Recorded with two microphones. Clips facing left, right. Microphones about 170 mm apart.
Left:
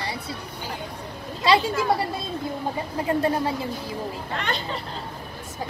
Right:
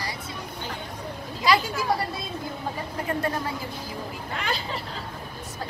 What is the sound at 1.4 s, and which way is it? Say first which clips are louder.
Speech: left 3 dB; 30° left (ahead or behind).